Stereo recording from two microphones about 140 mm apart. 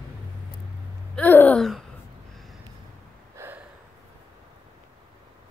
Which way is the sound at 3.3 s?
15° right (ahead or behind).